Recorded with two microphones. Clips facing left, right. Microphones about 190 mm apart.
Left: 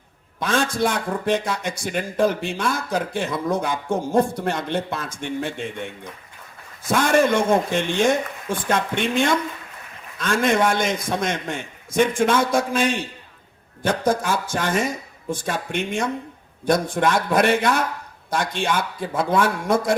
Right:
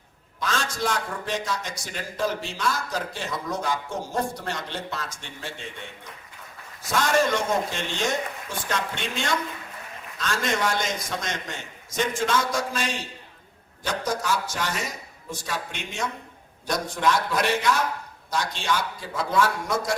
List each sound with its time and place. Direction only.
0.3 s a man's voice: 55° left (ahead or behind)